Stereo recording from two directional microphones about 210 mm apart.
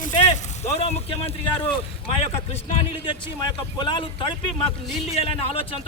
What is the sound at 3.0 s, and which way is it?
A man's voice, 20° left (ahead or behind).